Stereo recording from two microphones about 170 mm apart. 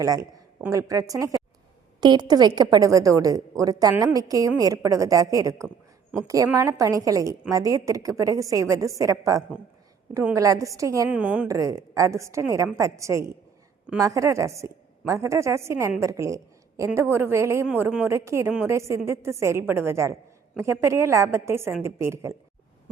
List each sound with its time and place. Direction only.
0.0 s a woman's voice: 20° right (ahead or behind)
11.1 s a woman's voice: 10° right (ahead or behind)
11.4 s a woman's voice: 20° right (ahead or behind)